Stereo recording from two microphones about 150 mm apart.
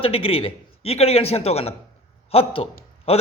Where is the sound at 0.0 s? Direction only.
40° left (ahead or behind).